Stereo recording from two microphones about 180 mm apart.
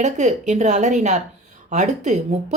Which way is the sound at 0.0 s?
40° right (ahead or behind).